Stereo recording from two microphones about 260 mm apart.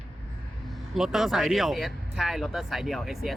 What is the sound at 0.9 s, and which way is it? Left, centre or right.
Speech, centre.